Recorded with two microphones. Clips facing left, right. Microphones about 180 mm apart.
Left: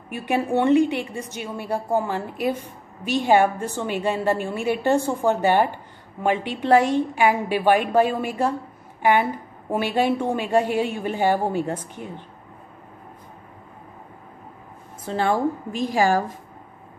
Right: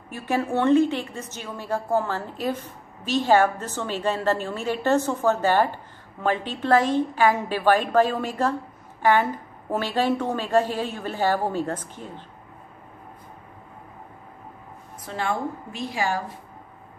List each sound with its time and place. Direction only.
0.1 s a woman's voice: 15° left (ahead or behind)
15.0 s a woman's voice: 35° left (ahead or behind)